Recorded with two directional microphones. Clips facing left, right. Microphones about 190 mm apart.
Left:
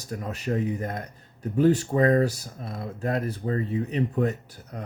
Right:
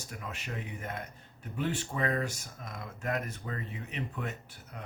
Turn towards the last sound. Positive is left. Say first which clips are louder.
# left 9 dB
turn(degrees=40)  # may be behind; listen again after turning